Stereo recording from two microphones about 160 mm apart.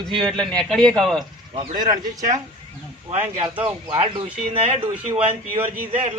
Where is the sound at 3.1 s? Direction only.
40° right (ahead or behind).